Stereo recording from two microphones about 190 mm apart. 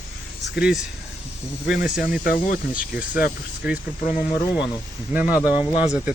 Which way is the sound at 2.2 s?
50° left (ahead or behind).